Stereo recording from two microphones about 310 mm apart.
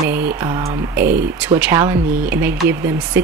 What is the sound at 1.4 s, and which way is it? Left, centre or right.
Speech, centre.